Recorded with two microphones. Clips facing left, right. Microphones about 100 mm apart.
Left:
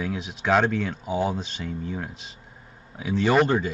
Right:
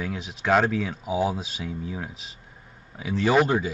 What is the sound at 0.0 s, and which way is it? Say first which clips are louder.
Speech: left 1 dB; centre (ahead or behind).